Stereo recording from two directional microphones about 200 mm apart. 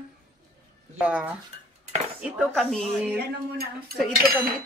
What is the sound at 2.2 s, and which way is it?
Speech, centre (ahead or behind).